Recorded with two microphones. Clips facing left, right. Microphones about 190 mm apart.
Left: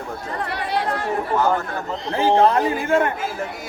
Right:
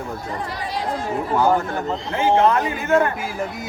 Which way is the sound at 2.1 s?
35° left (ahead or behind).